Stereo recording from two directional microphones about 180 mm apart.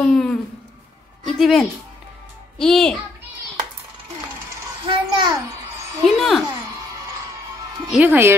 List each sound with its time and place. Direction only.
0.0 s a child's voice: 5° left (ahead or behind)
4.8 s a sound: 25° right (ahead or behind)
6.0 s a child's voice: centre (ahead or behind)
7.9 s speech: 10° right (ahead or behind)